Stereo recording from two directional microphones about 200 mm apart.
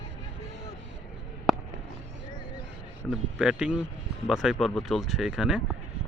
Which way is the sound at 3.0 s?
5° right (ahead or behind).